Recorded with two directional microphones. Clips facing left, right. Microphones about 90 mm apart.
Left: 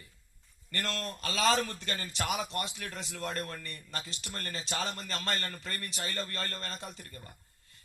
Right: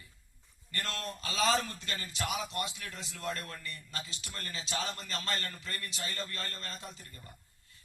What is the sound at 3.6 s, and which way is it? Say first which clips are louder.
A man's voice: left 1 dB; 55° left (ahead or behind).